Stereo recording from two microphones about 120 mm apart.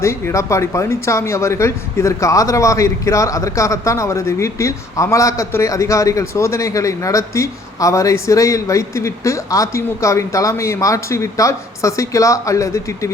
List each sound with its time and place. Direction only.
0.0 s speech: 25° left (ahead or behind)